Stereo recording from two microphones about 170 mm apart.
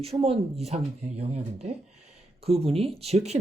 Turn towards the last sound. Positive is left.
turn(degrees=-40)  # may be behind; listen again after turning